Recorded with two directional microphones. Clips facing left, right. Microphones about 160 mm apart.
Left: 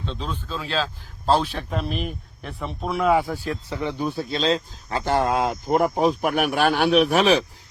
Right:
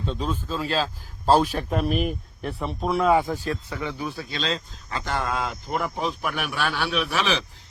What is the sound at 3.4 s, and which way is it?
Speech, 20° left (ahead or behind).